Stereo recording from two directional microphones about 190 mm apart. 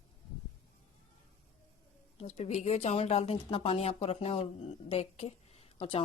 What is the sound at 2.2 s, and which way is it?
Speech, 35° left (ahead or behind).